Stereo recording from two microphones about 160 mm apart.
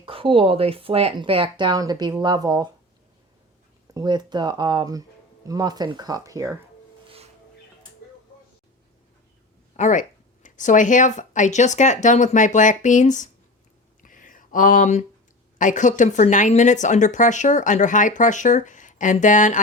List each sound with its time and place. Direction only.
0.0 s speech: 35° right (ahead or behind)
3.9 s speech: 25° right (ahead or behind)
9.7 s a woman's voice: 50° left (ahead or behind)
14.0 s a sound: 55° left (ahead or behind)
15.5 s a woman's voice: 50° left (ahead or behind)